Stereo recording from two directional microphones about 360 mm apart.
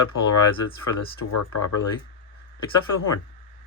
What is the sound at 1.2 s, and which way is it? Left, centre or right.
Speech, left.